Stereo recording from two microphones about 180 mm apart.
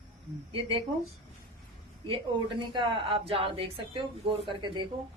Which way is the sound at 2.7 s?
30° right (ahead or behind).